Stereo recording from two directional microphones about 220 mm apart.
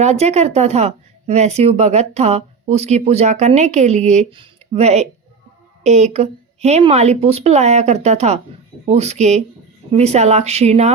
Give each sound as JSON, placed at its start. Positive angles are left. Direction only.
{"t": 0.0, "sound": "speech", "side_deg": -30}